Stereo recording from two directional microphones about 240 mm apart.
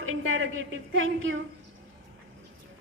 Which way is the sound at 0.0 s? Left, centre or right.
Right.